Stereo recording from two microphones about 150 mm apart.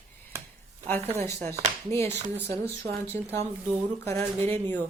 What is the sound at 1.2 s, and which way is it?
Speech, 15° left (ahead or behind).